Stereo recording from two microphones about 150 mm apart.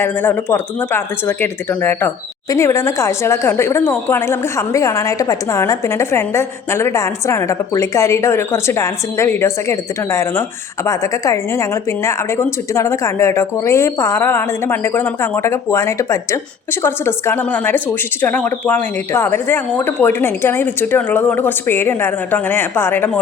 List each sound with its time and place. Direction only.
0.0 s speech: 15° left (ahead or behind)